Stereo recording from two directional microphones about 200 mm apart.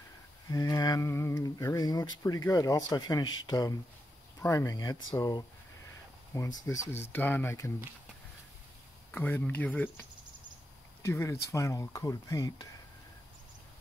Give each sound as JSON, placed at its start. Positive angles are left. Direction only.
{"t": 0.5, "sound": "speech", "side_deg": 15}
{"t": 9.1, "sound": "speech", "side_deg": 10}